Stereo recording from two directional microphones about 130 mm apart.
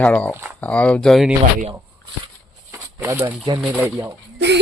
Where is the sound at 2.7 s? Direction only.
20° right (ahead or behind).